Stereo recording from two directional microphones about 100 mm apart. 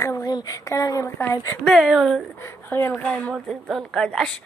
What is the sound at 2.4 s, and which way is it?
Speech, 25° left (ahead or behind).